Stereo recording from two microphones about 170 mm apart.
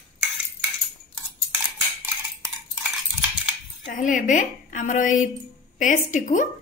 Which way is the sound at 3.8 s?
50° left (ahead or behind).